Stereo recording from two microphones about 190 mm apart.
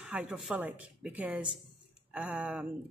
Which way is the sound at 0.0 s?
5° right (ahead or behind).